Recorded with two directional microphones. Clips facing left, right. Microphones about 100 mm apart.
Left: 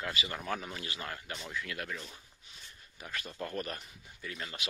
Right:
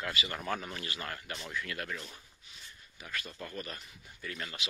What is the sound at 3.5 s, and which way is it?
Speech, 45° left (ahead or behind).